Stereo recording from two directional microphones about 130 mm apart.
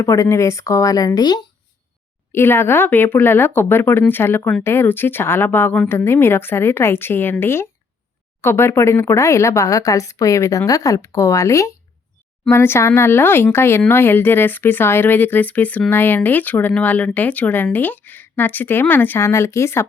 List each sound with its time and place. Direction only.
0.0 s speech: 25° left (ahead or behind)
2.3 s speech: 20° left (ahead or behind)